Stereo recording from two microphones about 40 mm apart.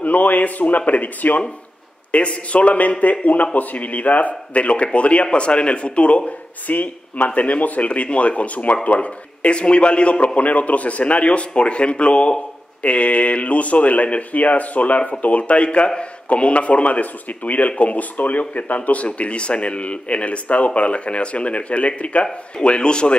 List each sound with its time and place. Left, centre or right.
0.0 s speech: left